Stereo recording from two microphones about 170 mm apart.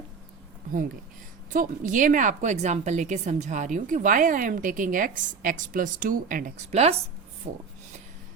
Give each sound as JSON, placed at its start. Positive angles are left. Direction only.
{"t": 1.5, "sound": "a woman's voice", "side_deg": -50}